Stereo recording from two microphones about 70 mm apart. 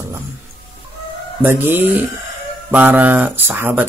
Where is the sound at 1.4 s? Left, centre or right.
Right.